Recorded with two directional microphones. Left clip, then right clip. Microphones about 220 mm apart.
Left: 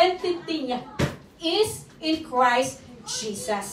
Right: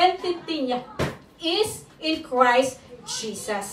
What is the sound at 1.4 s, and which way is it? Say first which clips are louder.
A child's voice: left 1 dB; 15° right (ahead or behind).